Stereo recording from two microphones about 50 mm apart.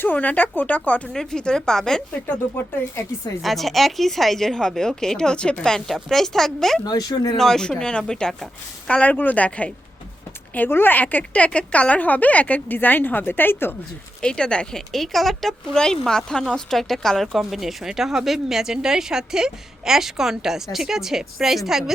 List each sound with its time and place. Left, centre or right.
0.0 s a woman's voice: left
1.1 s a woman's voice: centre
2.2 s speech: left
3.4 s a woman's voice: centre; by 9.1 s left
9.1 s a woman's voice: left
10.7 s a woman's voice: left
11.2 s a woman's voice: left
14.2 s a woman's voice: centre
17.3 s speech: centre